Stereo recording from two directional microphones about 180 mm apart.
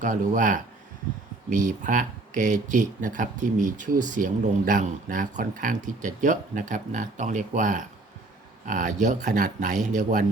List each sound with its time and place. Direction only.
0.0 s speech: 45° right (ahead or behind)